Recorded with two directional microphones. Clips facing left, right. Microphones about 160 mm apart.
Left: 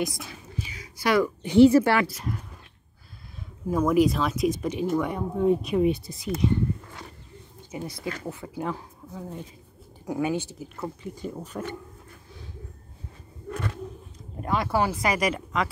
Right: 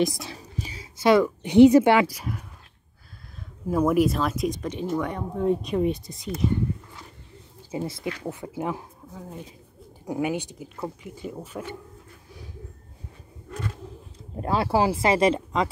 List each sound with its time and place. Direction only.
0.2 s whispering: 35° right (ahead or behind)
0.9 s speech: 20° right (ahead or behind)
3.7 s speech: 5° right (ahead or behind)
7.7 s speech: 25° right (ahead or behind)
10.0 s speech: 15° right (ahead or behind)
13.5 s a sound: 65° left (ahead or behind)
14.4 s speech: 30° right (ahead or behind)